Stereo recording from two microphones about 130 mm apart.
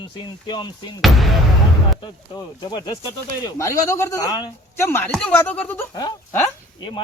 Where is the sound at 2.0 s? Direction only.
35° left (ahead or behind).